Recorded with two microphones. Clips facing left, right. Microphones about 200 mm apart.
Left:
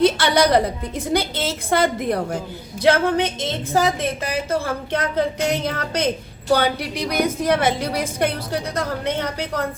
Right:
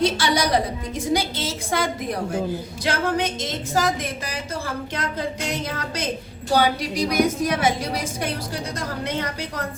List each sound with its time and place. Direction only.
0.0 s a woman's voice: 55° left (ahead or behind)